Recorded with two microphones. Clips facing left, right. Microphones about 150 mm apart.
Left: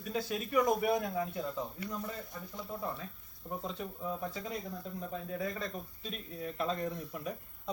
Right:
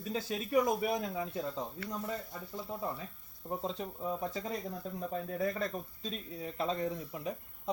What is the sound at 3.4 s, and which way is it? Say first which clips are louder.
Speech: right 2 dB; 30° right (ahead or behind).